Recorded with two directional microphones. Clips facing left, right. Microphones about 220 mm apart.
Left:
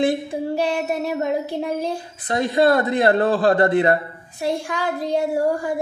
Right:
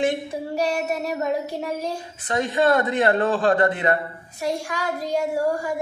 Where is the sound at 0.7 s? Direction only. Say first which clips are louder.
Left 2 dB; 30° left (ahead or behind).